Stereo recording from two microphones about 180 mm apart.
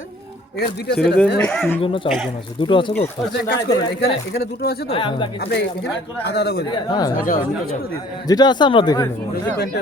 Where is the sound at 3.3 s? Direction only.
65° left (ahead or behind).